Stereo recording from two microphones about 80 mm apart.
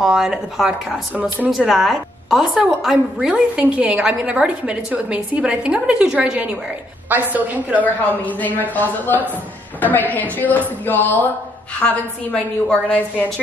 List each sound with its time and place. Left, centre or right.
0.0 s a woman's voice: centre
7.8 s a man's voice: left